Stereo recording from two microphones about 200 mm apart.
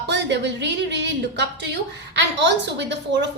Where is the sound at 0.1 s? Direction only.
60° right (ahead or behind).